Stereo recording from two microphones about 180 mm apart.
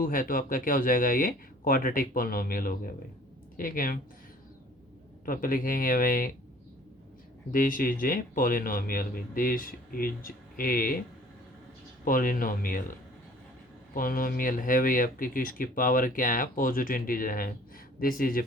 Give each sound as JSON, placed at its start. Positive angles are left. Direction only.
{"t": 0.0, "sound": "speech", "side_deg": 50}
{"t": 5.2, "sound": "speech", "side_deg": 50}
{"t": 7.5, "sound": "speech", "side_deg": 50}
{"t": 12.0, "sound": "speech", "side_deg": 50}
{"t": 13.9, "sound": "speech", "side_deg": 50}